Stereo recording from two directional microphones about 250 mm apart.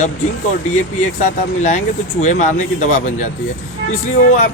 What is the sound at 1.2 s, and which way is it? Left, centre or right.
A man's voice, left.